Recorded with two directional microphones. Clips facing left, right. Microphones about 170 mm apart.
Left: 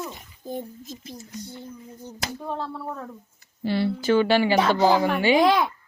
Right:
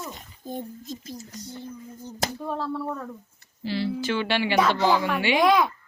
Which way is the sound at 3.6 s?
55° left (ahead or behind).